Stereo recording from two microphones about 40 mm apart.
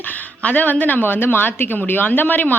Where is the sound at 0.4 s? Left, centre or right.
Left.